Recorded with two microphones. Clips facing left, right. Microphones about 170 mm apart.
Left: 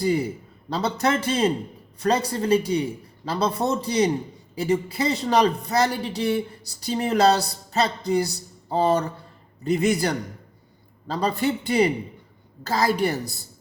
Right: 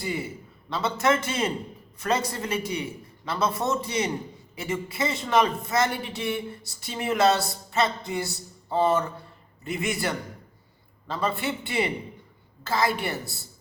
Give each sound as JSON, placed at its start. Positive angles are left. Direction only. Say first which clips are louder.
{"t": 0.0, "sound": "a man's voice", "louder": "left 8 dB", "side_deg": 40}